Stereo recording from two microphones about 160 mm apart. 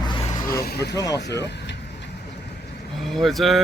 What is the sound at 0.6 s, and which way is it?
Vehicle, 90° left.